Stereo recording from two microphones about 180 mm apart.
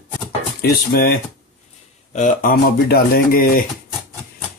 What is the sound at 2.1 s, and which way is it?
Speech, 50° left (ahead or behind).